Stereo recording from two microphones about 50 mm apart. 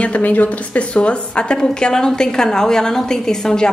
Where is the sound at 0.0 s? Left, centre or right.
Left.